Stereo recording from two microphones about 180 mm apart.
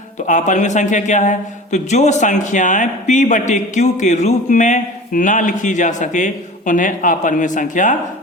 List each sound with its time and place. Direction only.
0.3 s a man's voice: 45° left (ahead or behind)